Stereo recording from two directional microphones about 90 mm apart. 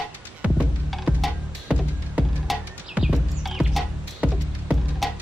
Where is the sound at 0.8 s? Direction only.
Centre (ahead or behind).